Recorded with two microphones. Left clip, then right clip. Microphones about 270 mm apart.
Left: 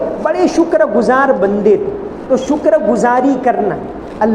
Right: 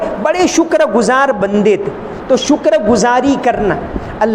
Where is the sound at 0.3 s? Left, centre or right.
Right.